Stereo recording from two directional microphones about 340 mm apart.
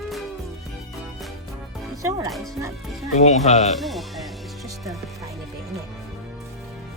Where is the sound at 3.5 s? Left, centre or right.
Centre.